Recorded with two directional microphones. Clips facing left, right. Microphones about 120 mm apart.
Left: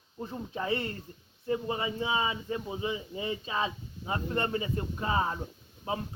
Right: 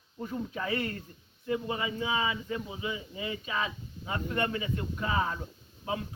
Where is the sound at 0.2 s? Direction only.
25° left (ahead or behind).